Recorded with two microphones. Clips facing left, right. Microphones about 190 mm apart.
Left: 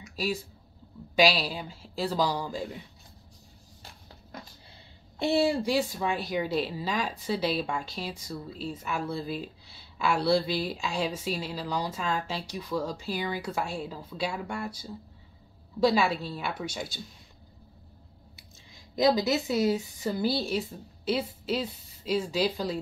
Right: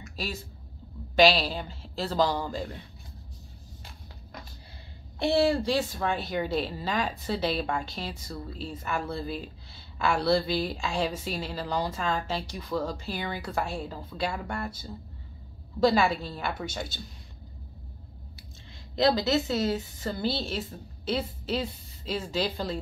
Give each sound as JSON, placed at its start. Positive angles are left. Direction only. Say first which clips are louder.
{"t": 0.1, "sound": "a sound", "louder": "left 5 dB", "side_deg": 5}
{"t": 1.1, "sound": "speech", "louder": "right 3 dB", "side_deg": 5}
{"t": 5.2, "sound": "speech", "louder": "right 1 dB", "side_deg": 15}
{"t": 18.9, "sound": "speech", "louder": "even", "side_deg": 15}